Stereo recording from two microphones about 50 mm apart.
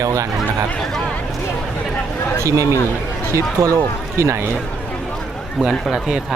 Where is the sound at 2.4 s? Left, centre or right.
Right.